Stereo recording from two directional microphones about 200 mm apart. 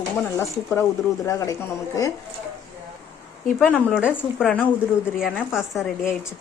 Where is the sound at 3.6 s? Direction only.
5° right (ahead or behind).